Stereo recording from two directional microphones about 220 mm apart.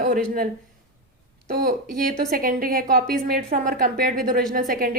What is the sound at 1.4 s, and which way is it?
A woman's voice, 45° right (ahead or behind).